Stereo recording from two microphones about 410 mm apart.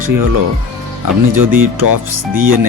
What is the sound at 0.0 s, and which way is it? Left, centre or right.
Speech, right.